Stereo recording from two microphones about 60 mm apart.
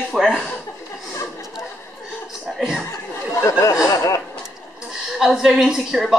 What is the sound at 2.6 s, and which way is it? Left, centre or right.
Chuckle, centre.